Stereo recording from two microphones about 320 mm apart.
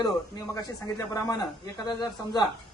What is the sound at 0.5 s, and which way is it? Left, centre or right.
Speech, centre.